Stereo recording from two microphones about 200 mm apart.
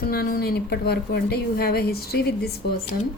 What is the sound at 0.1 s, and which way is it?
A woman's voice, 50° left (ahead or behind).